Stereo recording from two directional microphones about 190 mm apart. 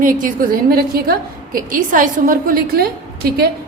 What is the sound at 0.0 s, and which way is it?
A woman's voice, 45° right (ahead or behind).